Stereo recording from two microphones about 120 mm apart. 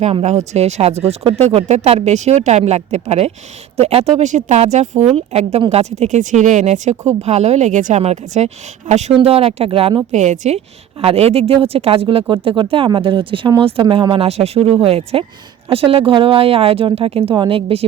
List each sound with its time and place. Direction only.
0.0 s speech: 65° right (ahead or behind)
6.0 s speech: 85° right; by 9.1 s 70° right (ahead or behind)
9.1 s speech: 55° right (ahead or behind)
10.1 s speech: 75° right (ahead or behind)
11.0 s speech: 60° right (ahead or behind)